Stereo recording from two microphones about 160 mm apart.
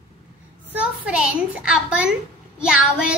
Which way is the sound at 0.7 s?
5° right (ahead or behind).